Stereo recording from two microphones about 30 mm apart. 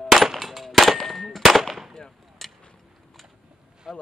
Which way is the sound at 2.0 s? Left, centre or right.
Centre.